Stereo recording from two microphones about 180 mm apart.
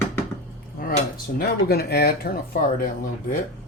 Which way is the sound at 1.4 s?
60° left (ahead or behind).